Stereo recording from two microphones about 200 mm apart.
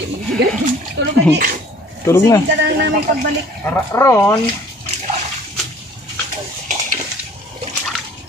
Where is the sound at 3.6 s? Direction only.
15° left (ahead or behind).